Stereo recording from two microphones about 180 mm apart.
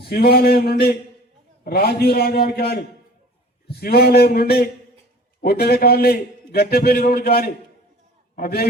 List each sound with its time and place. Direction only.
0.0 s a man's voice: 60° left (ahead or behind)